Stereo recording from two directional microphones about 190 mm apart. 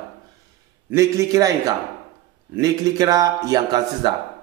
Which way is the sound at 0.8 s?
15° right (ahead or behind).